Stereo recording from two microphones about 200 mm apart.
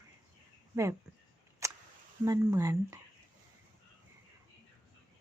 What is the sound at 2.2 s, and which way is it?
Speech, 15° right (ahead or behind).